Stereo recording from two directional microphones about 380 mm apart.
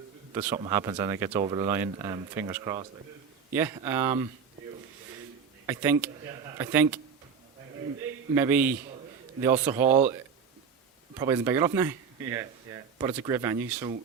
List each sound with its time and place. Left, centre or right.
0.3 s speech: centre
5.6 s speech: centre
8.4 s speech: centre
11.2 s speech: centre